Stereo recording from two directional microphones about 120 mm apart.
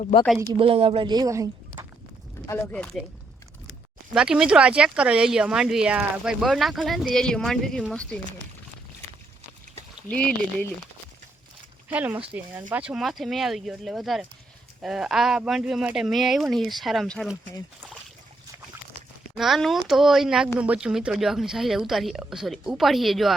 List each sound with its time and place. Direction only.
0.1 s speech: 80° left
0.6 s speech: 50° right (ahead or behind)
1.1 s a woman's voice: 30° right (ahead or behind)
2.7 s speech: 10° left (ahead or behind)
4.1 s speech: 5° right (ahead or behind)
10.1 s speech: 10° left (ahead or behind)
11.9 s speech: 15° right (ahead or behind)
19.4 s speech: centre (ahead or behind)